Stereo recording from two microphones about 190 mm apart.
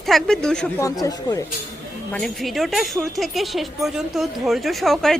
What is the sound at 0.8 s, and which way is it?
Speech, 20° left (ahead or behind).